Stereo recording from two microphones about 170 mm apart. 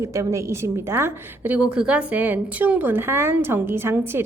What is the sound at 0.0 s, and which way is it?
A woman's voice, 20° right (ahead or behind).